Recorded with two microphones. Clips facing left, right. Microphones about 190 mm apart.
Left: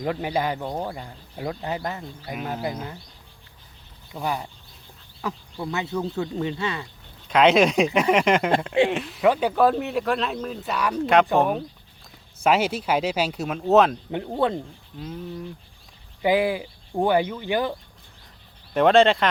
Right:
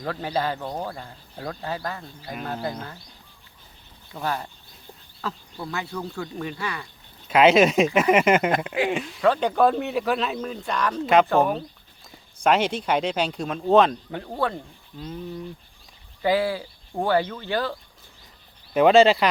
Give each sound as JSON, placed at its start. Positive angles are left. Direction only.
{"t": 0.0, "sound": "speech", "side_deg": 15}
{"t": 2.3, "sound": "speech", "side_deg": 10}
{"t": 4.1, "sound": "speech", "side_deg": 15}
{"t": 7.3, "sound": "speech", "side_deg": -5}
{"t": 9.2, "sound": "speech", "side_deg": 15}
{"t": 9.5, "sound": "speech", "side_deg": 0}
{"t": 12.4, "sound": "speech", "side_deg": 5}
{"t": 14.1, "sound": "speech", "side_deg": 20}
{"t": 14.9, "sound": "speech", "side_deg": 0}
{"t": 16.2, "sound": "speech", "side_deg": 15}
{"t": 18.7, "sound": "speech", "side_deg": 0}